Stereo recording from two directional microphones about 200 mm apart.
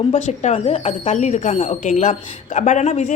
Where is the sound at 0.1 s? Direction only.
35° left (ahead or behind).